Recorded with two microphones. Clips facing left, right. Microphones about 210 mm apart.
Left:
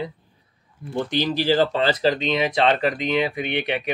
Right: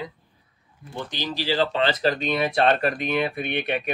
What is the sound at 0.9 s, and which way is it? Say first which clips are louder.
Speech: left 8 dB; 55° left (ahead or behind).